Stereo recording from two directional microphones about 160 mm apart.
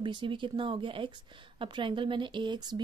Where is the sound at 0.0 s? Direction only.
30° right (ahead or behind).